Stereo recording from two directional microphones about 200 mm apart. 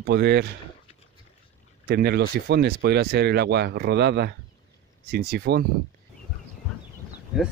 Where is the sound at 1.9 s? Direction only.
55° right (ahead or behind).